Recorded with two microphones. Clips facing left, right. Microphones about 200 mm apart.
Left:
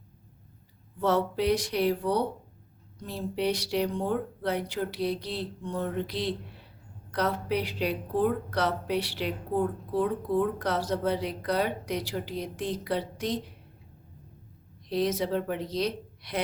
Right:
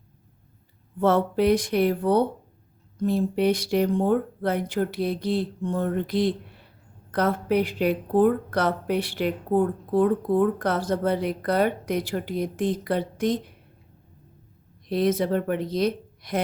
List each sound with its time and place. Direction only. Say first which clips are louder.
0.9 s a woman's voice: right 5 dB; 55° right (ahead or behind)
14.8 s a woman's voice: right 5 dB; 55° right (ahead or behind)